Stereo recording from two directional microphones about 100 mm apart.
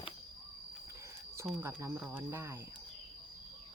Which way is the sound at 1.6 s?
20° right (ahead or behind).